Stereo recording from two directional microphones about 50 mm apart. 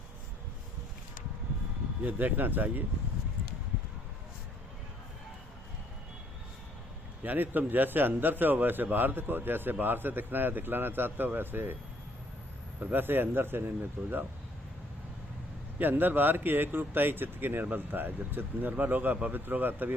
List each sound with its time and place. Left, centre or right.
2.0 s speech: right
7.2 s a man's voice: right
12.8 s a man's voice: right
14.0 s speech: right
15.8 s speech: right